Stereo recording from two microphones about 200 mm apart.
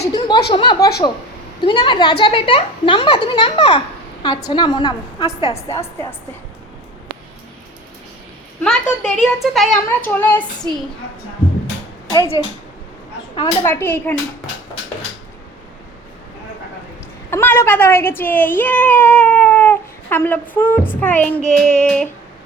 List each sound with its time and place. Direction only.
0.1 s speech: 20° left (ahead or behind)
5.7 s speech: 15° left (ahead or behind)
8.6 s a woman's voice: 5° left (ahead or behind)
12.1 s speech: 20° left (ahead or behind)
17.3 s speech: 10° left (ahead or behind)